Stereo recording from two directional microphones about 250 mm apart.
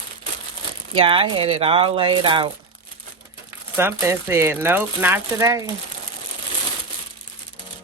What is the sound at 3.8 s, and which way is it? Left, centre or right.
Speech, centre.